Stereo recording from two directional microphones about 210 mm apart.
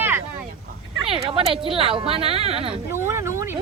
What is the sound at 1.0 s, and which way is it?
A woman's voice, 25° right (ahead or behind).